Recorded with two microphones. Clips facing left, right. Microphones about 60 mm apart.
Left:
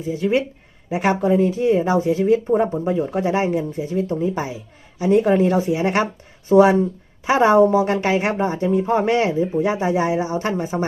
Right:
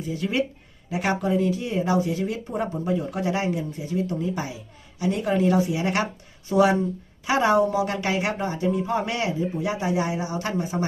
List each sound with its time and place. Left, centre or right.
0.0 s a woman's voice: left